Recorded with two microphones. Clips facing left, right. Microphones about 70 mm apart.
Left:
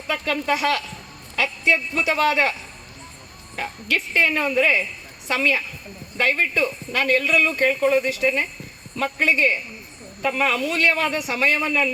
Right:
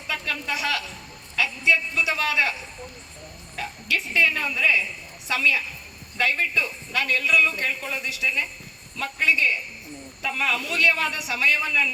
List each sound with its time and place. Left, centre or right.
0.1 s a man's voice: left
3.5 s a man's voice: left